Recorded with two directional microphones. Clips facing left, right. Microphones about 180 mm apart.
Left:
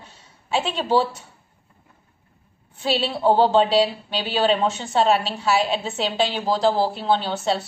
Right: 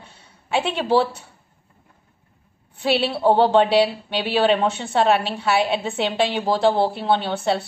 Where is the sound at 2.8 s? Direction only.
65° right (ahead or behind).